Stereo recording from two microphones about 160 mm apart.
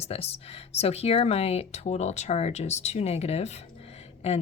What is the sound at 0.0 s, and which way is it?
Speech, 40° left (ahead or behind).